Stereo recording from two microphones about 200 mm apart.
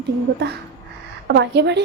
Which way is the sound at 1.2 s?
60° right (ahead or behind).